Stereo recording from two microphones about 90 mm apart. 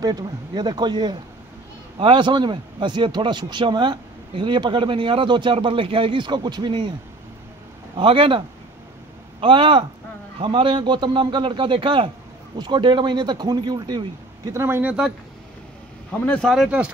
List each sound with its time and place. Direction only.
0.0 s speech: 45° right (ahead or behind)
2.0 s a man's voice: 65° right (ahead or behind)
7.9 s a man's voice: 75° right (ahead or behind)
12.5 s speech: 55° right (ahead or behind)
14.5 s speech: 30° right (ahead or behind)
16.1 s speech: 10° left (ahead or behind)
16.5 s speech: 10° right (ahead or behind)